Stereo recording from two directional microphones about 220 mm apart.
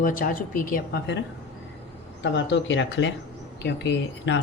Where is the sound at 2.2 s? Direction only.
55° left (ahead or behind).